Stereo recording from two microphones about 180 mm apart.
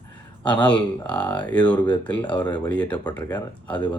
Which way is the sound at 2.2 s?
25° left (ahead or behind).